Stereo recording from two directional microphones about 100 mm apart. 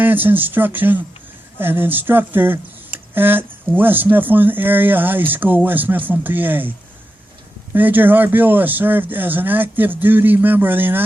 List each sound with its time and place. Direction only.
0.0 s speech: 20° right (ahead or behind)